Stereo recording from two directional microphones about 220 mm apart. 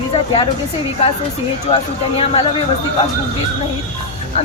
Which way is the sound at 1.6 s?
25° left (ahead or behind).